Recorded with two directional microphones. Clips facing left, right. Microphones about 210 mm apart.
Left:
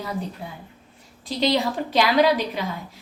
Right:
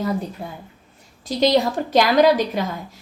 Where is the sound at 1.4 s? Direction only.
45° right (ahead or behind).